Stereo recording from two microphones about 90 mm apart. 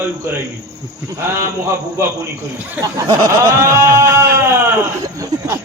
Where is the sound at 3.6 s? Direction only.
30° right (ahead or behind).